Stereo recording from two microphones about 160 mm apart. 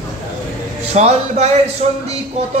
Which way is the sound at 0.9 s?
40° right (ahead or behind).